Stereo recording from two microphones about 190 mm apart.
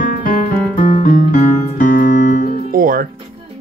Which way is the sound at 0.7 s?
45° left (ahead or behind).